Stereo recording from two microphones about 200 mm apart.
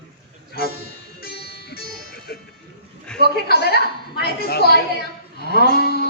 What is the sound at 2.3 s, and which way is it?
Music, 50° left (ahead or behind).